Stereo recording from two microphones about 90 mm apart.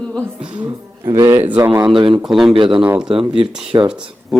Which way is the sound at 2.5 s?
70° right (ahead or behind).